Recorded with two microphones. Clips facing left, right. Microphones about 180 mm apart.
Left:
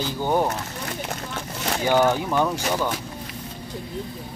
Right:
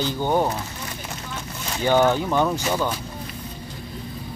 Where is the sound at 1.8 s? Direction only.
10° left (ahead or behind).